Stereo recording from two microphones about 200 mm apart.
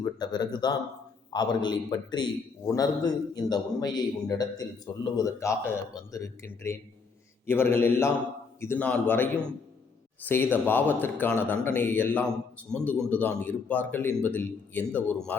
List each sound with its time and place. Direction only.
0.0 s a man's voice: 20° left (ahead or behind)